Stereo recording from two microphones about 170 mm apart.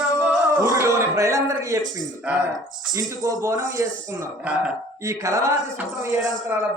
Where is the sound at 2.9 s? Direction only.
20° right (ahead or behind).